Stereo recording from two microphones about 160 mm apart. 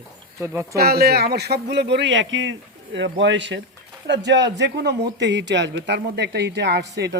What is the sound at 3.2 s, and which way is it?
Speech, 90° right.